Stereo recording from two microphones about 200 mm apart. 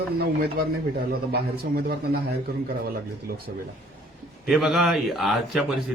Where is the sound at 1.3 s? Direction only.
50° right (ahead or behind).